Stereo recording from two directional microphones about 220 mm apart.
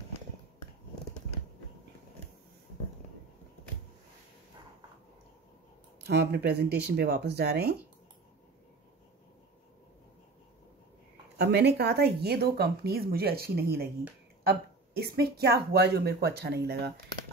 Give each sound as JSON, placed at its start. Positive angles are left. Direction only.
{"t": 6.0, "sound": "speech", "side_deg": -50}
{"t": 11.3, "sound": "speech", "side_deg": -50}